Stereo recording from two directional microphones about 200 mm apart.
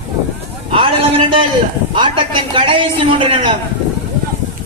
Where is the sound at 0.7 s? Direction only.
25° right (ahead or behind).